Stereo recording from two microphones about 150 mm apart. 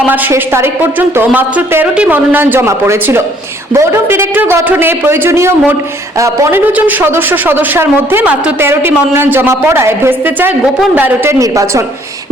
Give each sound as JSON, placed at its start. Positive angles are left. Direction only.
{"t": 0.0, "sound": "speech", "side_deg": -10}